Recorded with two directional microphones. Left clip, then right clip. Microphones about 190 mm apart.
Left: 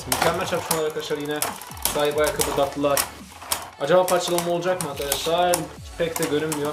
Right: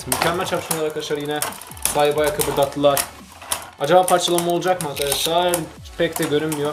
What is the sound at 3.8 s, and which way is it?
Speech, 40° right (ahead or behind).